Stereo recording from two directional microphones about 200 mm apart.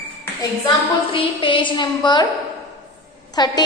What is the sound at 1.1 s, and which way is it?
A woman's voice, 25° left (ahead or behind).